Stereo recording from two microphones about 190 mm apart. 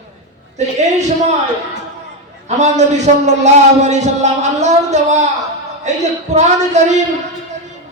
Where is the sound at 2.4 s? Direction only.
35° right (ahead or behind).